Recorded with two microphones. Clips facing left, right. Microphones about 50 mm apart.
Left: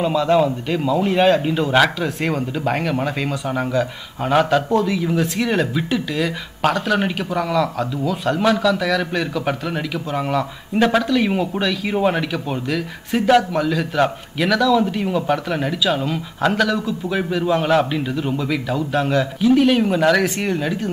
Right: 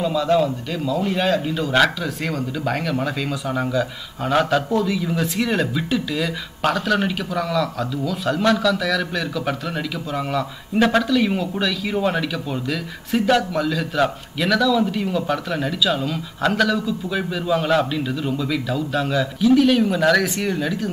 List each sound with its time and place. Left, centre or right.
0.1 s a man's voice: centre
1.7 s speech: centre
10.8 s speech: centre
11.1 s speech: centre
16.4 s speech: centre
17.1 s a man's voice: centre
19.1 s speech: centre